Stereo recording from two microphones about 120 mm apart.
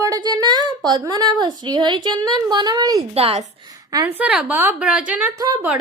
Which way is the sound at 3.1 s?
55° right (ahead or behind).